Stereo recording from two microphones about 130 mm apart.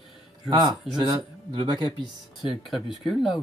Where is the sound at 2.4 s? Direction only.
5° right (ahead or behind).